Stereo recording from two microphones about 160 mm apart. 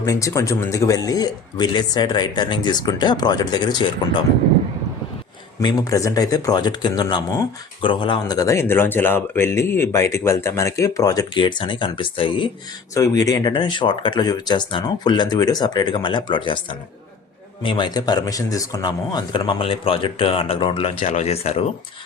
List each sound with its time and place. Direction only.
0.0 s speech: 20° left (ahead or behind)
5.5 s speech: 20° left (ahead or behind)
12.9 s speech: 20° left (ahead or behind)
17.6 s speech: 30° left (ahead or behind)